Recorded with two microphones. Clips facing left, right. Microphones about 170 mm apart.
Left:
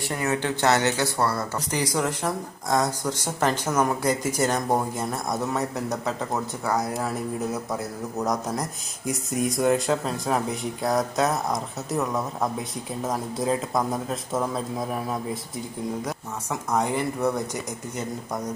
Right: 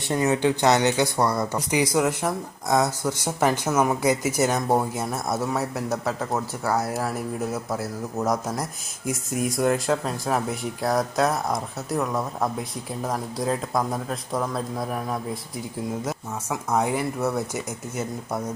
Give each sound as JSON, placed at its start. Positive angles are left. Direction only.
{"t": 0.1, "sound": "speech", "side_deg": -20}